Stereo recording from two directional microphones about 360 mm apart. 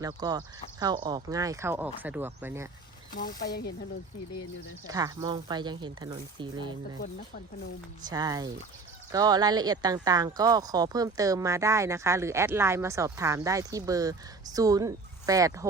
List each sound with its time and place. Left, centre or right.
0.0 s speech: centre
3.2 s speech: left
4.9 s speech: centre
8.1 s speech: centre